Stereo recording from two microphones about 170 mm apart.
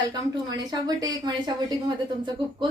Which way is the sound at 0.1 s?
25° right (ahead or behind).